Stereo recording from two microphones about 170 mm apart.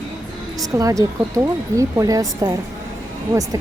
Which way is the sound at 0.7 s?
20° right (ahead or behind).